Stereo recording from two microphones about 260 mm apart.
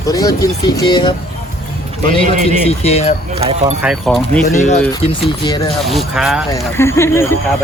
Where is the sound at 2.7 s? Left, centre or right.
Left.